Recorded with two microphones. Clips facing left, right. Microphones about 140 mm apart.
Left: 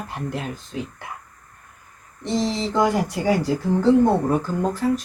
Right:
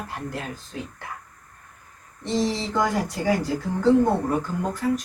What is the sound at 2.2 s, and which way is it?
Speech, 20° left (ahead or behind).